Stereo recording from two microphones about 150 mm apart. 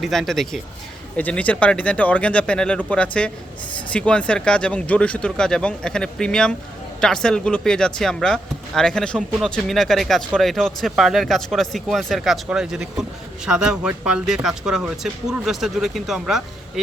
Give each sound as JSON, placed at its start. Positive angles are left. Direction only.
{"t": 0.0, "sound": "speech", "side_deg": 0}